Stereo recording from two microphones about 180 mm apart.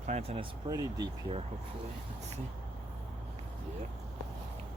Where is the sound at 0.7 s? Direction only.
20° right (ahead or behind).